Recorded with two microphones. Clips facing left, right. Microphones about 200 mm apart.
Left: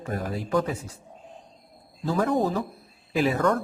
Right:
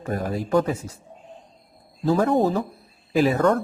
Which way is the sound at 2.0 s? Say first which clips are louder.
Right 4 dB; 40° right (ahead or behind).